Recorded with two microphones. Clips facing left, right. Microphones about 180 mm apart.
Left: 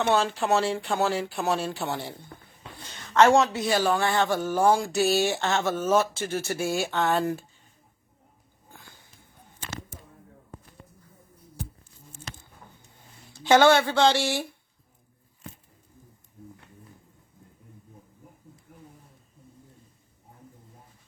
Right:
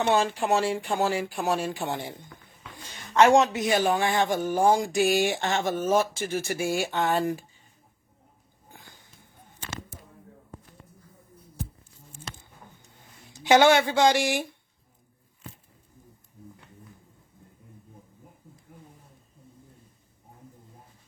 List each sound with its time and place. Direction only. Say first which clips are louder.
0.0 s a man's voice: even; 15° right (ahead or behind)
8.7 s walk: even; 15° right (ahead or behind)
13.3 s a man's voice: even; 15° right (ahead or behind)